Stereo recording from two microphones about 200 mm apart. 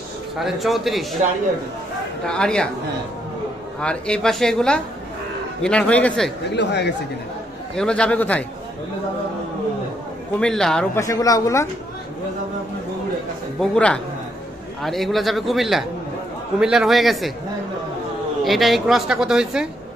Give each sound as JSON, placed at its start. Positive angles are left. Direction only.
{"t": 0.4, "sound": "a woman's voice", "side_deg": 0}
{"t": 2.2, "sound": "a woman's voice", "side_deg": 5}
{"t": 3.8, "sound": "a woman's voice", "side_deg": 5}
{"t": 6.5, "sound": "speech", "side_deg": 60}
{"t": 7.7, "sound": "a woman's voice", "side_deg": 5}
{"t": 10.3, "sound": "a woman's voice", "side_deg": 5}
{"t": 11.0, "sound": "speech", "side_deg": 15}
{"t": 13.6, "sound": "a woman's voice", "side_deg": 5}
{"t": 18.4, "sound": "a woman's voice", "side_deg": 0}